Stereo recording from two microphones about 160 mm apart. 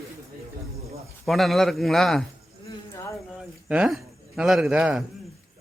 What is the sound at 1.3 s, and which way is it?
Speech, centre (ahead or behind).